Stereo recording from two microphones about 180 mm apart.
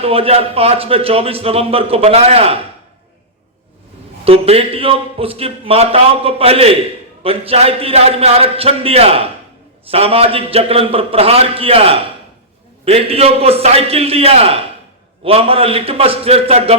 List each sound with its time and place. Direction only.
0.0 s a man's voice: 30° right (ahead or behind)
4.3 s a man's voice: 35° right (ahead or behind)